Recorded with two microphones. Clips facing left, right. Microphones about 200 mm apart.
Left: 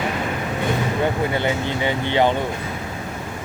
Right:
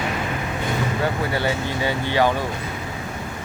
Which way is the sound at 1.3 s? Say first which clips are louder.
Left 1 dB; 20° left (ahead or behind).